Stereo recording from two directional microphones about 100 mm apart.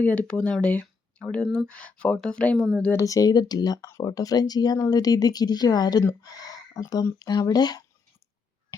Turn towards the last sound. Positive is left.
turn(degrees=40)  # may be behind; listen again after turning